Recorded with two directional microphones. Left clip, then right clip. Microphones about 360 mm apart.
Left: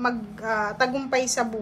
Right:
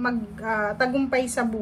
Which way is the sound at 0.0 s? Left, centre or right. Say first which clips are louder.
Left 1 dB; centre.